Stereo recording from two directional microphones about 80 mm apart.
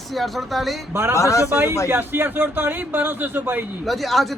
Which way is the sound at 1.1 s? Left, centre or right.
Left.